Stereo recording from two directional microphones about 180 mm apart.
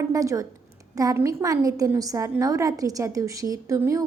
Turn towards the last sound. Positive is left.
turn(degrees=-15)  # may be behind; listen again after turning